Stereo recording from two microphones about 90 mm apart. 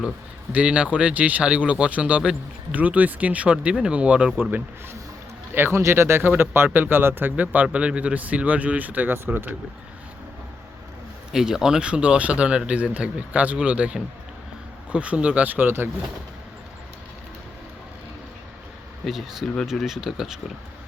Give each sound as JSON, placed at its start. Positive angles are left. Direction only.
{"t": 0.5, "sound": "a man's voice", "side_deg": -15}
{"t": 5.5, "sound": "a man's voice", "side_deg": -30}
{"t": 11.3, "sound": "a man's voice", "side_deg": -5}
{"t": 19.0, "sound": "speech", "side_deg": 0}